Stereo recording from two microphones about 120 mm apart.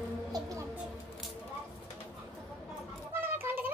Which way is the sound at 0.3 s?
30° right (ahead or behind).